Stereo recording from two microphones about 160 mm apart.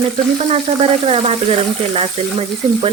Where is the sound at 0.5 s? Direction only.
40° right (ahead or behind).